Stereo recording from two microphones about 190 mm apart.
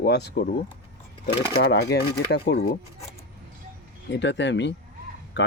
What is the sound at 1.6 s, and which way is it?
Speech, 60° left (ahead or behind).